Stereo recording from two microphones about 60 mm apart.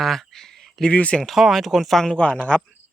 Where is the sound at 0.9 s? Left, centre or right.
Left.